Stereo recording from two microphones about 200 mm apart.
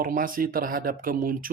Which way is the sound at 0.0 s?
45° right (ahead or behind).